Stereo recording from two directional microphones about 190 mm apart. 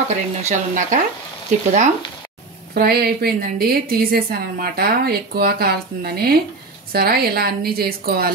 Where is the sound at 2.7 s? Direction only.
55° right (ahead or behind).